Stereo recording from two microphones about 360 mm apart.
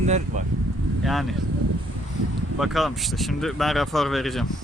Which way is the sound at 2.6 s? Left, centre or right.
Centre.